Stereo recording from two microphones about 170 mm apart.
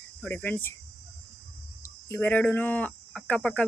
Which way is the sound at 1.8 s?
15° left (ahead or behind).